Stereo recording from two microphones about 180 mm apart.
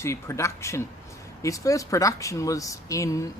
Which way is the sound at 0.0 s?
15° left (ahead or behind).